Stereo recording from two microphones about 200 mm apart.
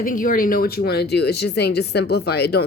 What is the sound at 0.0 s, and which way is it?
A woman's voice, 45° left (ahead or behind).